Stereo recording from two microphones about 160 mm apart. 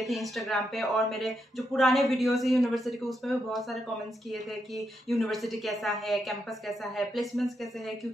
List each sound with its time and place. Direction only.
0.0 s speech: centre (ahead or behind)
4.7 s speech: centre (ahead or behind)